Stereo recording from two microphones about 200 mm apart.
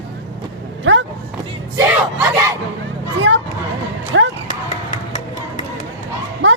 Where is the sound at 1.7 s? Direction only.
15° right (ahead or behind).